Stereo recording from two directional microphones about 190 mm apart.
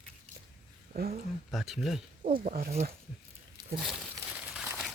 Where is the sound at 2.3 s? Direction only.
45° right (ahead or behind).